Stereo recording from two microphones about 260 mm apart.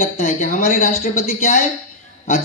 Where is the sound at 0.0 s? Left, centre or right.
Left.